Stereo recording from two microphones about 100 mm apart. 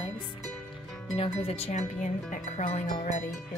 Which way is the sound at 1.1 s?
75° left (ahead or behind).